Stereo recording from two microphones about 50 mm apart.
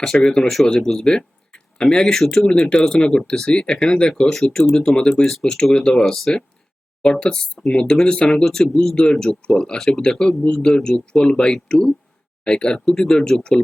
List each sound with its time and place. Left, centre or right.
0.0 s speech: centre
2.1 s speech: centre